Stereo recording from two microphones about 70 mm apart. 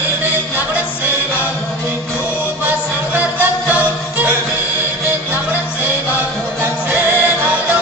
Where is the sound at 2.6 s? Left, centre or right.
Right.